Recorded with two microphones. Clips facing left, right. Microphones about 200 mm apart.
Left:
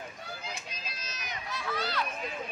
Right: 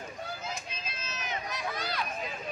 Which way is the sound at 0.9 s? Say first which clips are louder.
Right 4 dB; 40° left (ahead or behind).